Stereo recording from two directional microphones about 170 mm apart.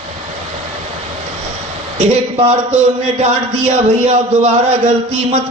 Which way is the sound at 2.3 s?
40° right (ahead or behind).